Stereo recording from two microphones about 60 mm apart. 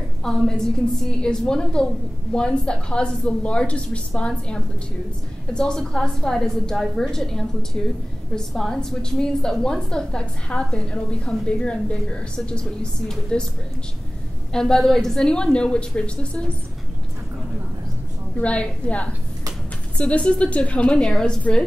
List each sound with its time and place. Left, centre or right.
0.2 s a woman's voice: centre
14.5 s a woman's voice: centre
18.4 s a woman's voice: left
21.0 s a woman's voice: centre